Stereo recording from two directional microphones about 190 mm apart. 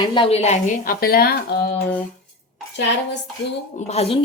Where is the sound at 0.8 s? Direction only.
55° left (ahead or behind).